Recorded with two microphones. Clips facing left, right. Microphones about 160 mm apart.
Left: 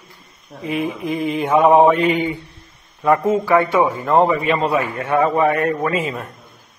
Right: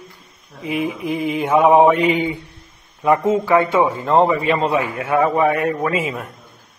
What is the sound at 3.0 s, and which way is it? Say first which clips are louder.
A man's voice: even; 20° right (ahead or behind).